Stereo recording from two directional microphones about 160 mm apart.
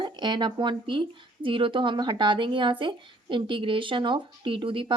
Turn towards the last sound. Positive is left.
turn(degrees=-30)  # may be behind; listen again after turning